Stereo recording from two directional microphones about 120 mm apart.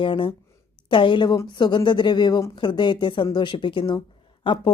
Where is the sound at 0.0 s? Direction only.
45° left (ahead or behind).